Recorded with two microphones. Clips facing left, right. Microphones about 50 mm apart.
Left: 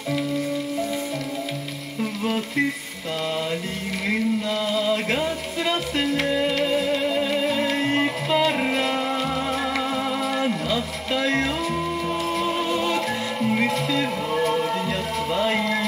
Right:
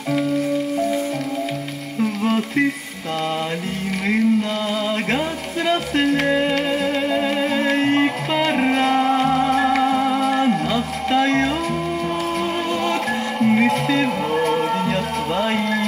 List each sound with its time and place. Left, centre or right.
2.2 s a sound: right
4.7 s chant: right
5.7 s music: right
13.4 s music: right